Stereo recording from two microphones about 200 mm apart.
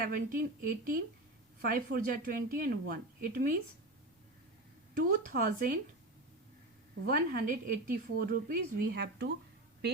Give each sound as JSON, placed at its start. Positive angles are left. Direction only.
{"t": 0.0, "sound": "a woman's voice", "side_deg": -45}
{"t": 4.9, "sound": "a woman's voice", "side_deg": -45}
{"t": 7.0, "sound": "a woman's voice", "side_deg": -45}